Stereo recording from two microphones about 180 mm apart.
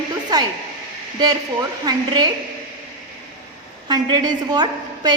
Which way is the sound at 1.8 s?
20° right (ahead or behind).